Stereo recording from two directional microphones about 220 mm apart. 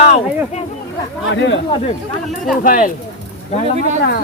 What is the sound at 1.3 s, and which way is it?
Speech, 55° left (ahead or behind).